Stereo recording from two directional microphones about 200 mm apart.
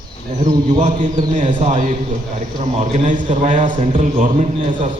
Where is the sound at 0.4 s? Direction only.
40° right (ahead or behind).